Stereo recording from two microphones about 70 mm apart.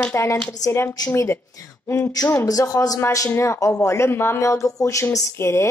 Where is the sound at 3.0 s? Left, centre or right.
Left.